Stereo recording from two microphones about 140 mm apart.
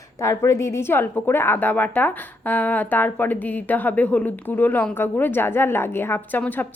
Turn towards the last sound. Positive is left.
turn(degrees=15)  # may be behind; listen again after turning